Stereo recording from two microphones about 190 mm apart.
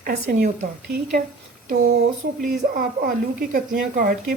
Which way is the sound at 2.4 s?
50° right (ahead or behind).